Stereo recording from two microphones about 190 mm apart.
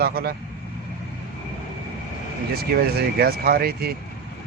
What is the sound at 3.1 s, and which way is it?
Speech, 55° right (ahead or behind).